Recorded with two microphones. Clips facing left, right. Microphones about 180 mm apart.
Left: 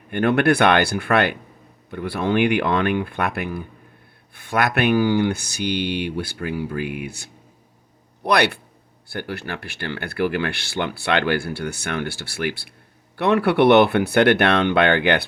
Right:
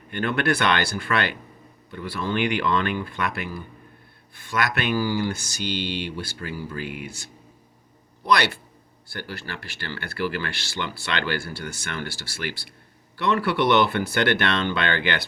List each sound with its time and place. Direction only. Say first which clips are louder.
0.1 s speech: left 6 dB; 55° left (ahead or behind)